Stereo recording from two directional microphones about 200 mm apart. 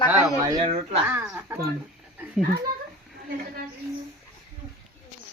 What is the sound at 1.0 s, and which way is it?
Speech, 5° right (ahead or behind).